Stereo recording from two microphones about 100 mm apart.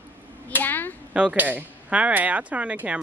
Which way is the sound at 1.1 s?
10° right (ahead or behind).